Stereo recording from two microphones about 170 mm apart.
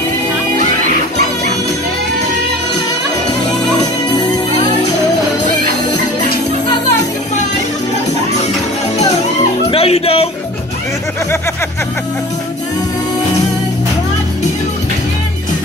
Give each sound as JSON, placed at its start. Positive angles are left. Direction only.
{"t": 3.8, "sound": "music", "side_deg": 25}
{"t": 9.7, "sound": "music", "side_deg": 35}